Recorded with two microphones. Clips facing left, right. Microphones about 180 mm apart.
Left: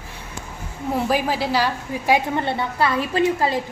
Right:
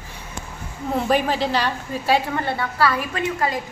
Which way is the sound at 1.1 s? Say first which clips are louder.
Right 3 dB; 5° left (ahead or behind).